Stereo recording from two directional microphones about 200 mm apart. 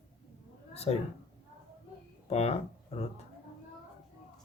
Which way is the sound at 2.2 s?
30° left (ahead or behind).